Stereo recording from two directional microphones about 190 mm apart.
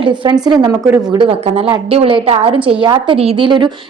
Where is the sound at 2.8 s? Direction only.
25° right (ahead or behind).